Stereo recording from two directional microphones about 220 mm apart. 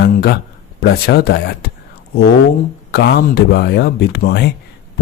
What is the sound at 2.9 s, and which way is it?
Speech, 50° left (ahead or behind).